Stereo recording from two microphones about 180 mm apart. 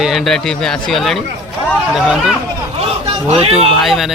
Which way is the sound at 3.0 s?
30° right (ahead or behind).